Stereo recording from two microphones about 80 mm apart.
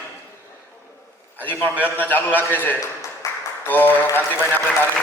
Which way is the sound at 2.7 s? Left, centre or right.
Left.